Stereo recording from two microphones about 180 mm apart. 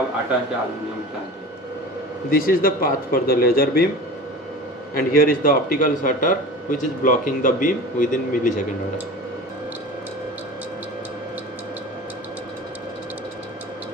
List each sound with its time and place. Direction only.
2.3 s a man's voice: 55° left (ahead or behind)
4.9 s a man's voice: 50° left (ahead or behind)